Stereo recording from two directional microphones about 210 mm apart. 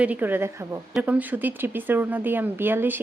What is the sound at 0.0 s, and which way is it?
Speech, 10° right (ahead or behind).